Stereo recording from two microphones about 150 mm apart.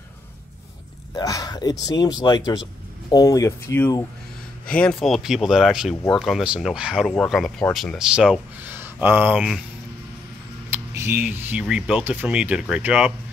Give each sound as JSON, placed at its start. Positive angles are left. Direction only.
{"t": 1.1, "sound": "speech", "side_deg": 25}
{"t": 4.7, "sound": "speech", "side_deg": 5}
{"t": 10.7, "sound": "speech", "side_deg": -15}